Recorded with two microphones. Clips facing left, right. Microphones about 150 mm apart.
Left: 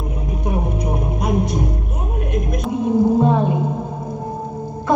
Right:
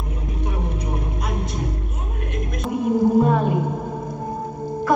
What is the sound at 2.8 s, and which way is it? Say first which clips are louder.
Music: left 1 dB; 25° left (ahead or behind).